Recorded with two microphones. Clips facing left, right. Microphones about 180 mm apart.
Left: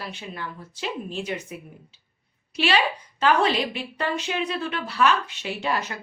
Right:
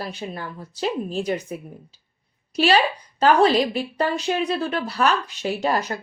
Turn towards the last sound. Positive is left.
turn(degrees=-40)  # may be behind; listen again after turning